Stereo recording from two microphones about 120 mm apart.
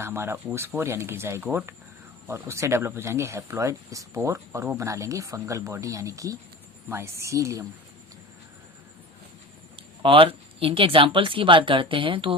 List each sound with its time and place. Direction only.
0.0 s speech: 20° right (ahead or behind)
10.0 s speech: 45° right (ahead or behind)